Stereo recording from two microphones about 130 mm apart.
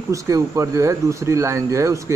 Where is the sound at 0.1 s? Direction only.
25° right (ahead or behind).